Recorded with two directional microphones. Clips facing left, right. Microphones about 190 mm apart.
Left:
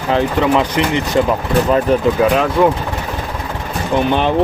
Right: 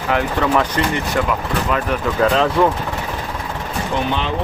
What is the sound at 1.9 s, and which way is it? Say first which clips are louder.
Speech: left 8 dB; 30° left (ahead or behind).